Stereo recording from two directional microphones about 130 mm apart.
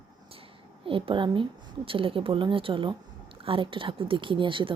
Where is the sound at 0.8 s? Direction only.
45° right (ahead or behind).